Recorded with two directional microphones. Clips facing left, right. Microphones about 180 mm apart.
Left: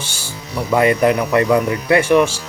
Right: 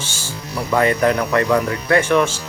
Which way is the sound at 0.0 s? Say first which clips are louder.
Even; 10° left (ahead or behind).